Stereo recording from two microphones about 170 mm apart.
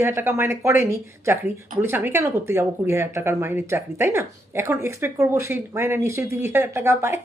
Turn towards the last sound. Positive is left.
turn(degrees=-15)  # may be behind; listen again after turning